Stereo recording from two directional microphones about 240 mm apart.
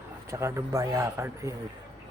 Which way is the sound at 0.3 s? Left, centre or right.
Centre.